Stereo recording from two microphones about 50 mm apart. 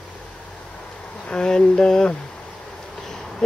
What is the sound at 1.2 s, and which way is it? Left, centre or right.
Speech, centre.